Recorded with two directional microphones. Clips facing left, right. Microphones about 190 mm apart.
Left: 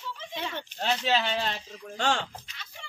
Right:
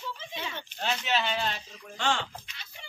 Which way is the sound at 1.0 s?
35° left (ahead or behind).